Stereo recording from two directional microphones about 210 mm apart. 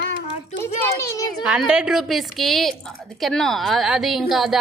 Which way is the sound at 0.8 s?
15° left (ahead or behind).